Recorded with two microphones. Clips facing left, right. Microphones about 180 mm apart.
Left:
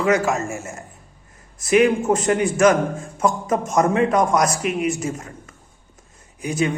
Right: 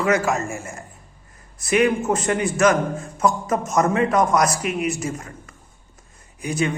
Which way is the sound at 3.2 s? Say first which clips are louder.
Left 1 dB; 10° left (ahead or behind).